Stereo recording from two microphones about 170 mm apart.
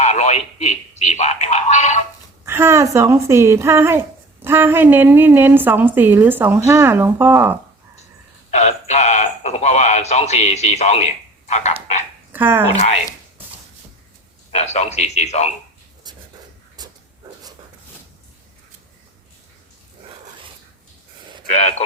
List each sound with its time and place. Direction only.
0.0 s speech: 40° left (ahead or behind)
2.4 s a woman's voice: 15° right (ahead or behind)
8.4 s speech: 40° left (ahead or behind)
12.3 s speech: 10° right (ahead or behind)
12.7 s a man's voice: 40° left (ahead or behind)
14.5 s a man's voice: 40° left (ahead or behind)
16.8 s a sound: 25° right (ahead or behind)
21.5 s a man's voice: 40° left (ahead or behind)